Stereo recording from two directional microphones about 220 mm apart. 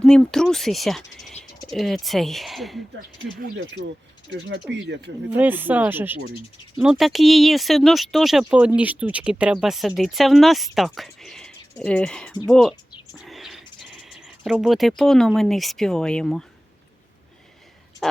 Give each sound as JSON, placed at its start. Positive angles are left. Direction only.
{"t": 0.0, "sound": "speech", "side_deg": 5}
{"t": 4.3, "sound": "mechanisms", "side_deg": -55}
{"t": 4.7, "sound": "speech", "side_deg": -50}
{"t": 5.4, "sound": "speech", "side_deg": -10}